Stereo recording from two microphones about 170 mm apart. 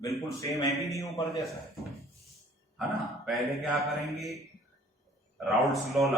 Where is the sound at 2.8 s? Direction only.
Centre (ahead or behind).